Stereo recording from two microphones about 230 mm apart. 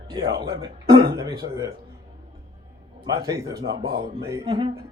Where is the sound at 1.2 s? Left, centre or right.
Centre.